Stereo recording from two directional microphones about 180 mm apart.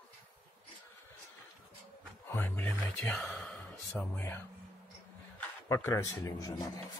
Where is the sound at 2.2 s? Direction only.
10° left (ahead or behind).